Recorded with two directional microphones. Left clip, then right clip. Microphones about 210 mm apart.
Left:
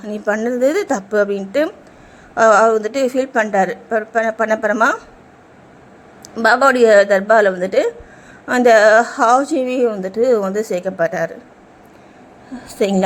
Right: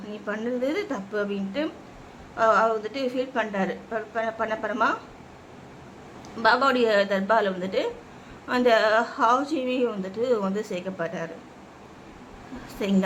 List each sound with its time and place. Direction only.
0.1 s a woman's voice: 25° left (ahead or behind)
6.3 s a woman's voice: 30° left (ahead or behind)
12.8 s a woman's voice: 25° left (ahead or behind)